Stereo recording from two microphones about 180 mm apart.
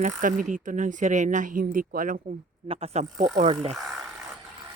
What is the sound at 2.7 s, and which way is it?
Speech, 35° right (ahead or behind).